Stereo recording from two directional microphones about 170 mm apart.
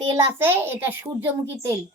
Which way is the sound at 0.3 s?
10° right (ahead or behind).